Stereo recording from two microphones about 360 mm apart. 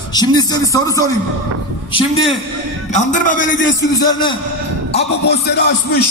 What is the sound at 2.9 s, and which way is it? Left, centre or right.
Speech, left.